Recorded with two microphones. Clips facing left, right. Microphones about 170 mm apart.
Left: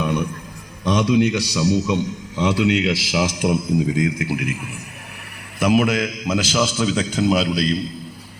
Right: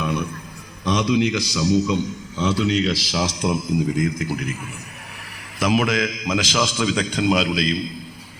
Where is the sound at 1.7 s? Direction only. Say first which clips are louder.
Even; 20° left (ahead or behind).